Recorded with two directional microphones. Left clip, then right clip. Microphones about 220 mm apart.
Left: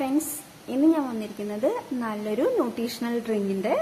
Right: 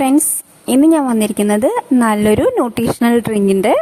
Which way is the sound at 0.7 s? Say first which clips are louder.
Right 11 dB; 50° right (ahead or behind).